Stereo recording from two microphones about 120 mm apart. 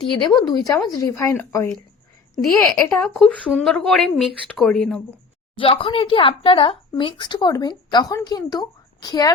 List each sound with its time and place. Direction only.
0.0 s speech: 35° left (ahead or behind)
2.6 s a woman's voice: 5° left (ahead or behind)
5.5 s speech: 50° left (ahead or behind)